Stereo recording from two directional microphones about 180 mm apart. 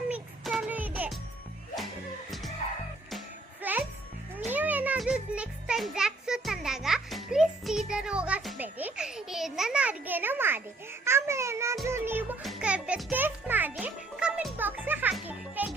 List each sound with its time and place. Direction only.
0.1 s music: 5° right (ahead or behind)
3.6 s music: 10° right (ahead or behind)
8.6 s a sound: 5° right (ahead or behind)
11.0 s music: 15° right (ahead or behind)
12.4 s music: centre (ahead or behind)